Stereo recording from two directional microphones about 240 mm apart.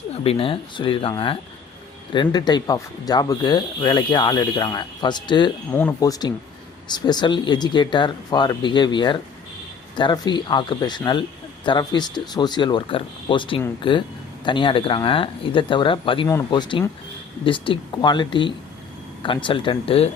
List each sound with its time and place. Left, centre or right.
0.3 s speech: left